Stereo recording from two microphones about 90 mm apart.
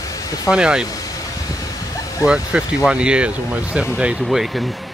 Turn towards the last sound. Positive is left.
turn(degrees=-5)  # may be behind; listen again after turning